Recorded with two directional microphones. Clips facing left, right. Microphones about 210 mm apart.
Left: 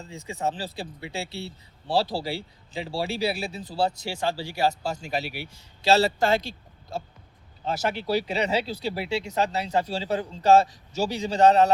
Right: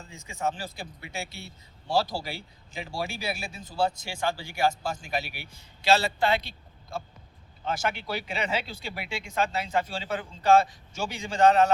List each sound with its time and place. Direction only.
0.0 s speech: 35° left (ahead or behind)
7.6 s speech: 35° left (ahead or behind)